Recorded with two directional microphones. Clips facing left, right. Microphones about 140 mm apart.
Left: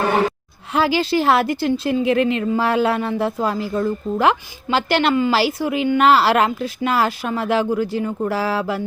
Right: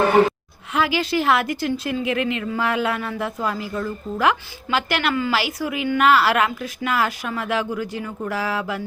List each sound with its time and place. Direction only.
0.7 s a woman's voice: 30° left (ahead or behind)